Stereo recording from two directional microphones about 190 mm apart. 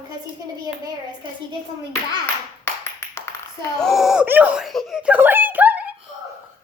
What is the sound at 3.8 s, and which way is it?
Speech, centre (ahead or behind).